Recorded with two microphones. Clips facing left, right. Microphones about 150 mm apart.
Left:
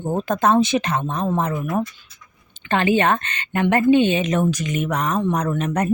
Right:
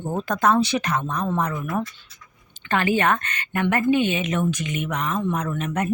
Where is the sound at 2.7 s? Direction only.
25° left (ahead or behind).